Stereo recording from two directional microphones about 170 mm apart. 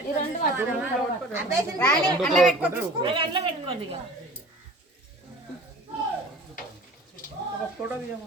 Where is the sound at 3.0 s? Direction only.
30° right (ahead or behind).